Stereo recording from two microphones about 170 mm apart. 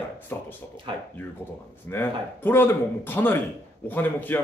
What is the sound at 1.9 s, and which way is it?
Speech, 15° left (ahead or behind).